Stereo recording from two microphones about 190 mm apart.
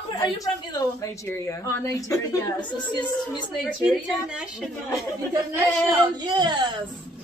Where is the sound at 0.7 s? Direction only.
15° left (ahead or behind).